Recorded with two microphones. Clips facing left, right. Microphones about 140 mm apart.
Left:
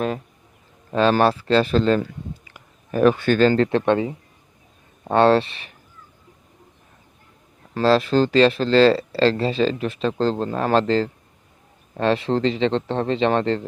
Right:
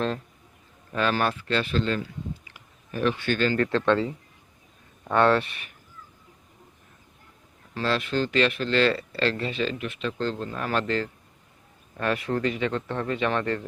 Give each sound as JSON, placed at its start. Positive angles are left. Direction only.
{"t": 0.9, "sound": "speech", "side_deg": 30}
{"t": 2.5, "sound": "a sound", "side_deg": 45}
{"t": 3.6, "sound": "speech", "side_deg": 20}
{"t": 7.7, "sound": "speech", "side_deg": 35}